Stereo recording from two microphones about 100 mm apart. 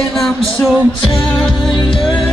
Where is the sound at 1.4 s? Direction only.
5° left (ahead or behind).